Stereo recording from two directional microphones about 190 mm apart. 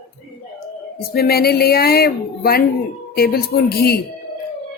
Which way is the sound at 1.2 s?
55° left (ahead or behind).